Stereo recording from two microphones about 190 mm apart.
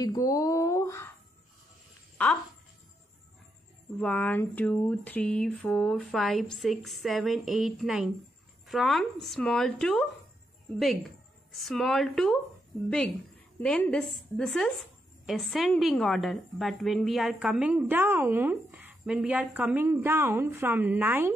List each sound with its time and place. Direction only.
0.0 s speech: 20° left (ahead or behind)
2.2 s speech: 5° left (ahead or behind)
4.0 s a sound: 5° left (ahead or behind)
10.8 s speech: centre (ahead or behind)
13.6 s a sound: 5° left (ahead or behind)
15.2 s a woman's voice: centre (ahead or behind)